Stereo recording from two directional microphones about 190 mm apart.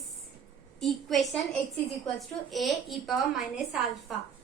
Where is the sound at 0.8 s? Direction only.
Centre (ahead or behind).